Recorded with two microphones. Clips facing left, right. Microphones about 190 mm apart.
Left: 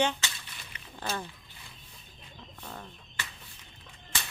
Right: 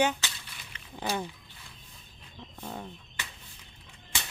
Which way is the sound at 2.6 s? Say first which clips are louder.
Right 5 dB; 15° right (ahead or behind).